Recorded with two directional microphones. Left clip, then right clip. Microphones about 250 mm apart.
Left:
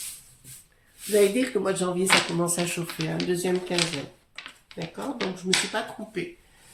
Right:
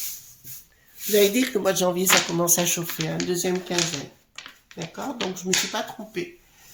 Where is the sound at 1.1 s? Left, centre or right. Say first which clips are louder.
Right 2 dB; right.